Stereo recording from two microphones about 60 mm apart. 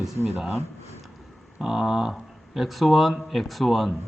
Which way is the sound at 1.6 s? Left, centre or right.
Centre.